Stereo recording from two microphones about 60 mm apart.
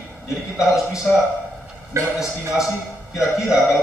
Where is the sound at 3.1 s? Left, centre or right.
Centre.